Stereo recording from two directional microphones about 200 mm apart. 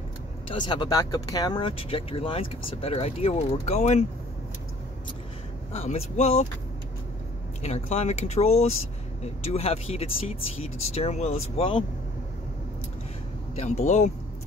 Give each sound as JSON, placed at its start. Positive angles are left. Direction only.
{"t": 0.7, "sound": "speech", "side_deg": 20}
{"t": 5.7, "sound": "speech", "side_deg": 30}
{"t": 7.6, "sound": "speech", "side_deg": 30}
{"t": 13.6, "sound": "speech", "side_deg": 35}